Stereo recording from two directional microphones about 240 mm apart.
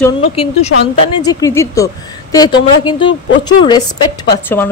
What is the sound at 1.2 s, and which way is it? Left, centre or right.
A woman's voice, centre.